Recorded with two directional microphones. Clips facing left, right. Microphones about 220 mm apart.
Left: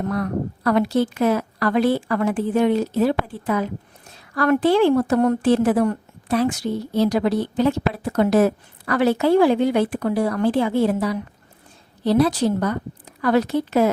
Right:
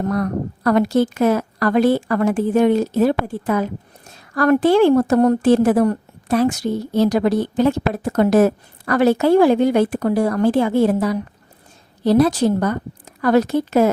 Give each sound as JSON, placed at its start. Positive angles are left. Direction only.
{"t": 0.0, "sound": "a woman's voice", "side_deg": -40}